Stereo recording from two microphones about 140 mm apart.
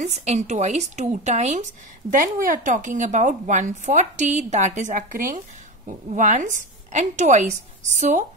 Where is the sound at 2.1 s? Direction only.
70° right (ahead or behind).